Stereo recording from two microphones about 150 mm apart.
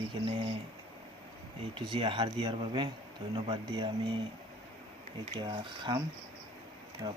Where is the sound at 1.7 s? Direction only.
35° right (ahead or behind).